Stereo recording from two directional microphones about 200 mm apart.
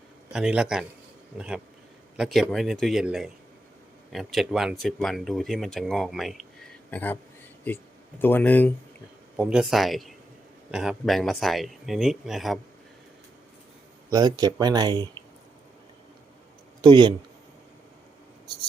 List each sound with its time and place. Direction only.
0.3 s speech: 5° right (ahead or behind)
9.3 s speech: 5° right (ahead or behind)
14.1 s speech: 20° right (ahead or behind)
16.8 s speech: 25° right (ahead or behind)